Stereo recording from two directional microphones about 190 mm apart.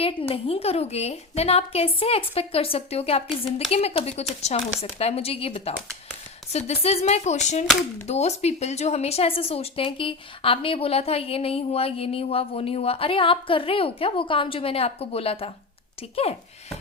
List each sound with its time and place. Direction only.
0.0 s a woman's voice: 30° left (ahead or behind)